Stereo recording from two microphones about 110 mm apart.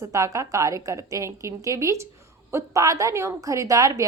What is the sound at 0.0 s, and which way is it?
A woman's voice, 30° right (ahead or behind).